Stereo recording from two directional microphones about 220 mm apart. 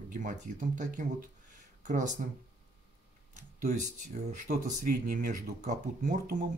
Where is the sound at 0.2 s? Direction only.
35° right (ahead or behind).